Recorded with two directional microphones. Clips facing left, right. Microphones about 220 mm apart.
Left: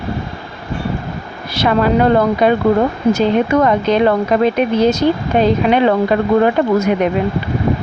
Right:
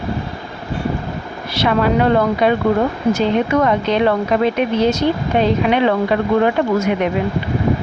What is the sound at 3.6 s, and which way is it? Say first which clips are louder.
Speech: left 3 dB; 40° left (ahead or behind).